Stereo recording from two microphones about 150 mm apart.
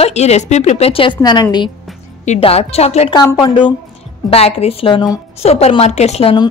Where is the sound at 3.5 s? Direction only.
35° left (ahead or behind).